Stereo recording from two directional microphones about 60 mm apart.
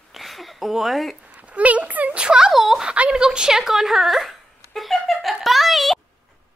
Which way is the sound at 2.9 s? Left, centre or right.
Centre.